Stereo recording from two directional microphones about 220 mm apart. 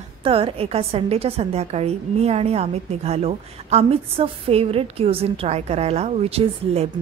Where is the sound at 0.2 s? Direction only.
25° right (ahead or behind).